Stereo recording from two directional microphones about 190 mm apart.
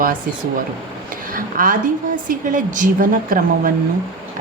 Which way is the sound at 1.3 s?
45° right (ahead or behind).